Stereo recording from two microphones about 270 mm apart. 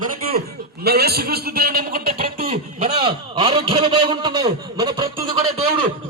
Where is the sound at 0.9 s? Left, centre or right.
Right; by 5.4 s centre.